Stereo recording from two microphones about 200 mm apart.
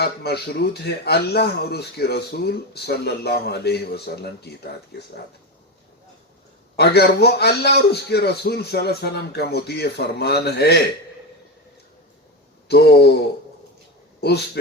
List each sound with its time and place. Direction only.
0.0 s speech: 50° left (ahead or behind)
6.7 s speech: 55° left (ahead or behind)
12.6 s a man's voice: 55° left (ahead or behind)